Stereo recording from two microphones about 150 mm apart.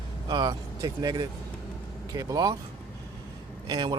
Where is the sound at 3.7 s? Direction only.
30° right (ahead or behind).